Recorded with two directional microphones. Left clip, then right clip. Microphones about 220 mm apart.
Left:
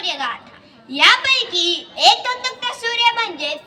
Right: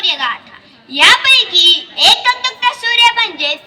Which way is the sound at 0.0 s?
60° left (ahead or behind).